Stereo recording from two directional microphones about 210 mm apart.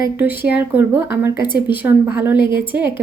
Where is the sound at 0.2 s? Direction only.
10° right (ahead or behind).